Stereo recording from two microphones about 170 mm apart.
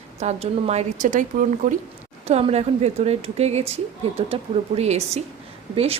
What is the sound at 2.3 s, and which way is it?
A woman's voice, 40° right (ahead or behind).